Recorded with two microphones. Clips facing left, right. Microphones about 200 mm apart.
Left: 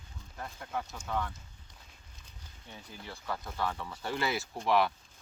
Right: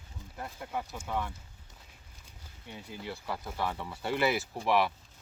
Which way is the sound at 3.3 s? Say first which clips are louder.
Even; 10° right (ahead or behind).